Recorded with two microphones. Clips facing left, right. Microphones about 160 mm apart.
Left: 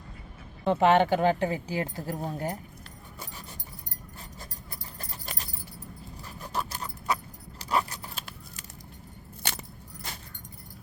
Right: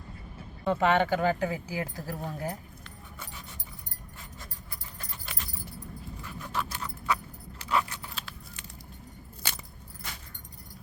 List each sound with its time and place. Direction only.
0.6 s speech: 25° left (ahead or behind)
4.9 s keys jangling: 40° left (ahead or behind)
6.2 s dog: 40° left (ahead or behind)
7.6 s a sound: 40° left (ahead or behind)